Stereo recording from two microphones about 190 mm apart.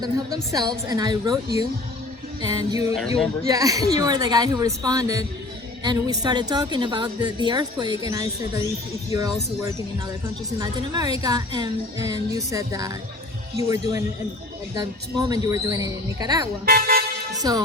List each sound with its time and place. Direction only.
0.5 s a woman's voice: 20° right (ahead or behind)
16.6 s speech: 50° right (ahead or behind)
17.3 s a woman's voice: 20° right (ahead or behind)